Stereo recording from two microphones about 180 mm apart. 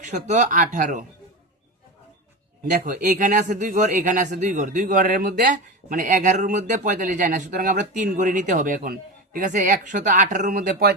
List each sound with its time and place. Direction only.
0.0 s speech: 40° right (ahead or behind)
2.6 s speech: 45° right (ahead or behind)